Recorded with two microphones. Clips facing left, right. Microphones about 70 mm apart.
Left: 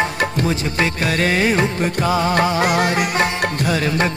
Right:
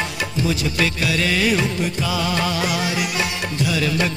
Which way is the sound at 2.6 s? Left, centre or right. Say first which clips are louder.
Left 5 dB; left.